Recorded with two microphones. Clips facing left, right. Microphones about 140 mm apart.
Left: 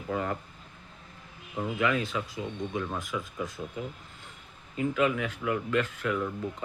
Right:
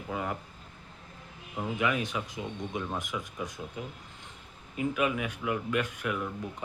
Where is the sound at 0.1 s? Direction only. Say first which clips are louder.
Left 3 dB; 15° right (ahead or behind).